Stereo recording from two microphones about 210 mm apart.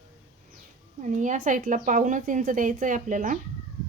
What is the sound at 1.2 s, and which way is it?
Speech, 40° right (ahead or behind).